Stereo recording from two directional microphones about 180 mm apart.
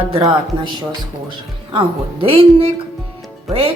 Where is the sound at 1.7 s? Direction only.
30° right (ahead or behind).